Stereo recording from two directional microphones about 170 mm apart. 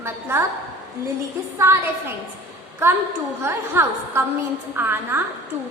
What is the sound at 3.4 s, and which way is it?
A woman's voice, 15° right (ahead or behind).